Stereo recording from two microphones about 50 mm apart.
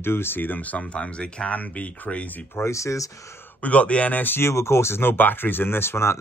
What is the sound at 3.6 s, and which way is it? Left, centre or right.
Speech, left.